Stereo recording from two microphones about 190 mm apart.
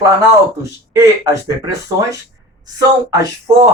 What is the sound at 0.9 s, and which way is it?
A woman's voice, 15° right (ahead or behind).